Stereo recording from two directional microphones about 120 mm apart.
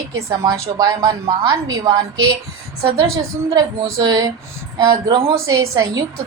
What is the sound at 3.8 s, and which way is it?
A woman's voice, 30° right (ahead or behind).